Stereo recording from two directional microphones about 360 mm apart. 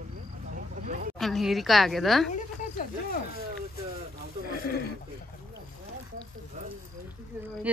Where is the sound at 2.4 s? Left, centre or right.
Left.